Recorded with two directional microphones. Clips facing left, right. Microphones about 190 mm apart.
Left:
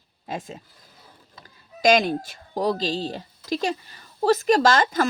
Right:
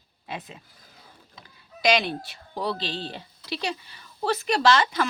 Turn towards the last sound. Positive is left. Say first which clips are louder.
# left 2 dB
turn(degrees=45)  # may be behind; listen again after turning